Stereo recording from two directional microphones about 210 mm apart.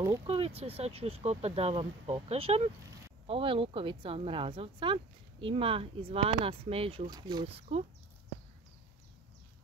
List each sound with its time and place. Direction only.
0.3 s speech: 30° right (ahead or behind)